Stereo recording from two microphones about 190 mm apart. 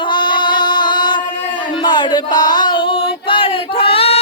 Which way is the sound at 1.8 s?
20° left (ahead or behind).